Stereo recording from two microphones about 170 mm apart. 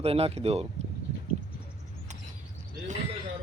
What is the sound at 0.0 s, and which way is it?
Speech, 35° right (ahead or behind).